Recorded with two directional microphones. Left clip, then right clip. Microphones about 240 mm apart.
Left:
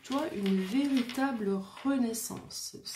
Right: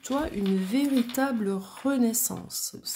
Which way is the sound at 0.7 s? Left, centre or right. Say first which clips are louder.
Right 6 dB; right.